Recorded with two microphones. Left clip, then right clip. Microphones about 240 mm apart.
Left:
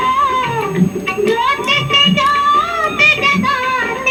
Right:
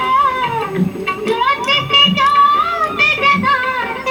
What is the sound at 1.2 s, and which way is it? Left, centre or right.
Child singing, right.